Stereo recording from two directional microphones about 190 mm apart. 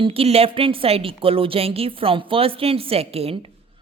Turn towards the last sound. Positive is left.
turn(degrees=-30)  # may be behind; listen again after turning